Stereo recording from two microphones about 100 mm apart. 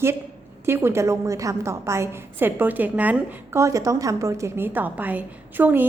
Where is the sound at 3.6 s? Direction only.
30° right (ahead or behind).